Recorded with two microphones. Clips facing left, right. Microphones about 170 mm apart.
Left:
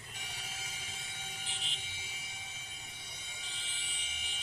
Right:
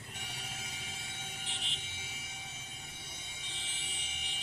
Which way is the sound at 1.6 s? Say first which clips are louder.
Right 1 dB; 65° right (ahead or behind).